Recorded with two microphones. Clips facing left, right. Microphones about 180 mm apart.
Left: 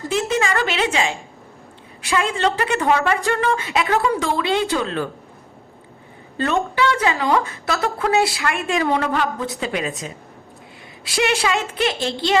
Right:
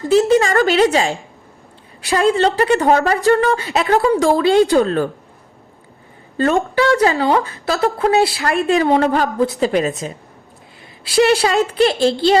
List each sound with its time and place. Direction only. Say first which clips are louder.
0.1 s a woman's voice: right 8 dB; 35° right (ahead or behind)
6.3 s a woman's voice: right 5 dB; 45° right (ahead or behind)
11.0 s a woman's voice: right 7 dB; 35° right (ahead or behind)